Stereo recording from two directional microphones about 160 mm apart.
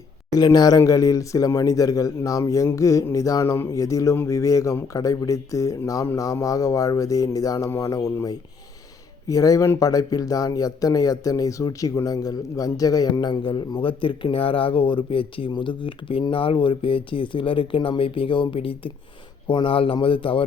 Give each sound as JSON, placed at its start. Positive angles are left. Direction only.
{"t": 0.3, "sound": "speech", "side_deg": 25}